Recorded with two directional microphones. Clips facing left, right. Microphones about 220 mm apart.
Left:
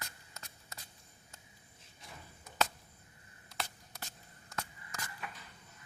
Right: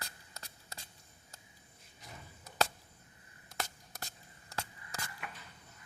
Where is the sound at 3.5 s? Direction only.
45° right (ahead or behind).